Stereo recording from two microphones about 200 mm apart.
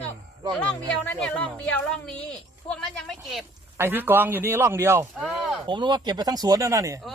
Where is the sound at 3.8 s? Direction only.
10° right (ahead or behind).